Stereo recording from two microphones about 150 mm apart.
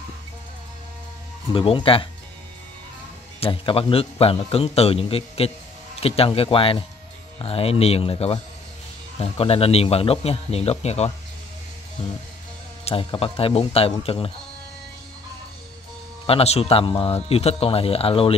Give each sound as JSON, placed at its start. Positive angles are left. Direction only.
{"t": 1.5, "sound": "a man's voice", "side_deg": 35}
{"t": 3.3, "sound": "a man's voice", "side_deg": 35}
{"t": 12.8, "sound": "a man's voice", "side_deg": 40}
{"t": 16.3, "sound": "a man's voice", "side_deg": 40}